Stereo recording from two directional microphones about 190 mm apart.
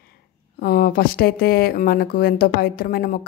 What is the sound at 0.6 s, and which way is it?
A woman's voice, 50° left (ahead or behind).